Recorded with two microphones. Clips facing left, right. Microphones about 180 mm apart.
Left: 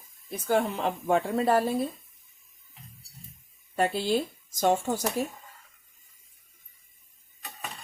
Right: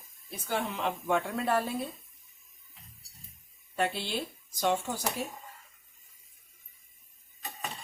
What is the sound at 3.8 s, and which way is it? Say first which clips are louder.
Speech: left 6 dB; 40° left (ahead or behind).